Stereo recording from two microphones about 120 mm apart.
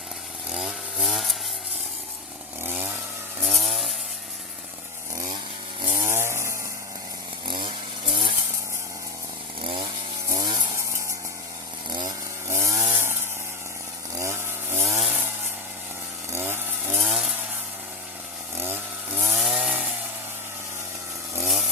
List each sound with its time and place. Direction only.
0.5 s chainsaw: 5° right (ahead or behind)
2.6 s chainsaw: 20° right (ahead or behind)
3.4 s chainsaw: centre (ahead or behind)
5.1 s chainsaw: 30° right (ahead or behind)
7.4 s chainsaw: 40° right (ahead or behind)
10.2 s chainsaw: 35° right (ahead or behind)
11.9 s chainsaw: 40° right (ahead or behind)
12.5 s chainsaw: 25° right (ahead or behind)
14.2 s chainsaw: 20° right (ahead or behind)
16.3 s chainsaw: 20° right (ahead or behind)
17.0 s chainsaw: 5° right (ahead or behind)
18.5 s chainsaw: 20° right (ahead or behind)
19.2 s chainsaw: 5° right (ahead or behind)